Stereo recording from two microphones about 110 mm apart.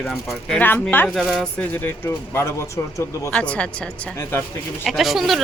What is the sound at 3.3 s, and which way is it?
Speech, 10° left (ahead or behind).